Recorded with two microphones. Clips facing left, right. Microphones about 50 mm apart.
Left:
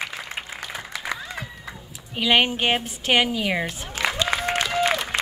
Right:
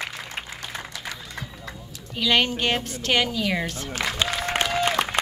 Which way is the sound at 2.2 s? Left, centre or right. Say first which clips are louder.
Left 2 dB; centre.